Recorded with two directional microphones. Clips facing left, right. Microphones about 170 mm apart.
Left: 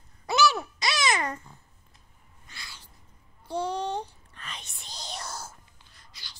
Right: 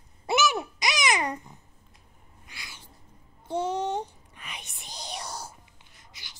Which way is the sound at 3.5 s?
20° right (ahead or behind).